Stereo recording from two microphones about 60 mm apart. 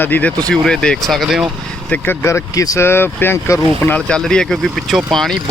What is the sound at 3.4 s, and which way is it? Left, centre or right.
Speech, left.